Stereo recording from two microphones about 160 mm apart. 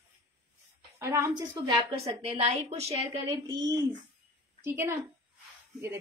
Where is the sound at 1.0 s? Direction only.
20° right (ahead or behind).